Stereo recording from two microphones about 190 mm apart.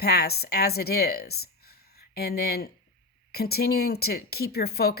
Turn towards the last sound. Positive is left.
turn(degrees=55)  # may be behind; listen again after turning